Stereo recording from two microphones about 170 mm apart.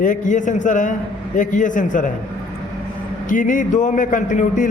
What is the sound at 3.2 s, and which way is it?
A man's voice, 50° left (ahead or behind).